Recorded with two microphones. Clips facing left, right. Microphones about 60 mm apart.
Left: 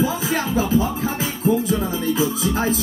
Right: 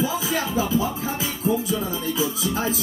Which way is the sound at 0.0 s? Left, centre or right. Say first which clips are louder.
Left 3 dB; left.